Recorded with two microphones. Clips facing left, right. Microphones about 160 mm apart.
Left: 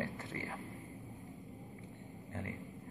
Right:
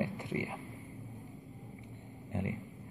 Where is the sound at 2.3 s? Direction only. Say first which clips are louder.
Right 7 dB; 20° right (ahead or behind).